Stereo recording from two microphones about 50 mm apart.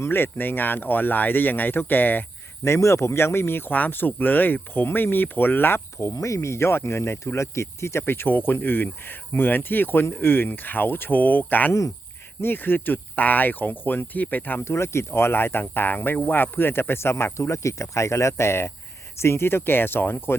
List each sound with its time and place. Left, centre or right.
0.1 s speech: left
2.6 s speech: left
14.6 s speech: left